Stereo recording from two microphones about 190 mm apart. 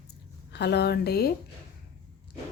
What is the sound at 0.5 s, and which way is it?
Speech, 60° left (ahead or behind).